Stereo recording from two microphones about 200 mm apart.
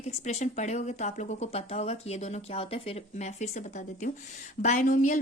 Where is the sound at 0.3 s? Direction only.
35° left (ahead or behind).